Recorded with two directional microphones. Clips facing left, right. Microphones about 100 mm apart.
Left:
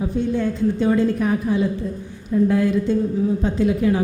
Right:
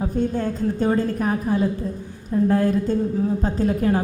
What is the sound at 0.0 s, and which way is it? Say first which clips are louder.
A woman's voice: left 1 dB; 45° right (ahead or behind).